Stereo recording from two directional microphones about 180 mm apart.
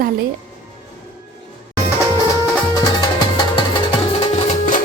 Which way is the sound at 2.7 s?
25° left (ahead or behind).